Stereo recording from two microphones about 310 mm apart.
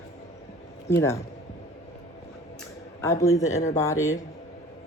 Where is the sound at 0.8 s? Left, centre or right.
Centre.